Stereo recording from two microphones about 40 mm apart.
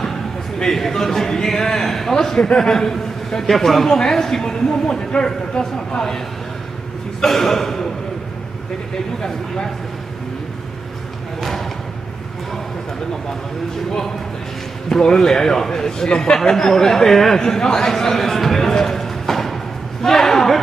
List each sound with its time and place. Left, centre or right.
0.7 s a man's voice: centre
2.4 s a man's voice: left
2.7 s a man's voice: centre
14.9 s a man's voice: centre
20.0 s a sound: centre